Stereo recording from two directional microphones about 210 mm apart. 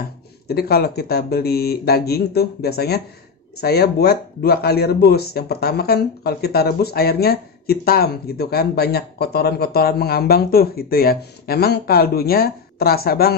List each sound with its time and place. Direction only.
0.5 s speech: 45° left (ahead or behind)